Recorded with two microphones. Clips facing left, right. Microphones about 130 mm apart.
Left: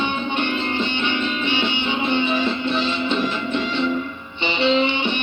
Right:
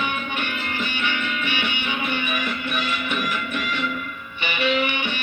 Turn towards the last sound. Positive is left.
turn(degrees=25)  # may be behind; listen again after turning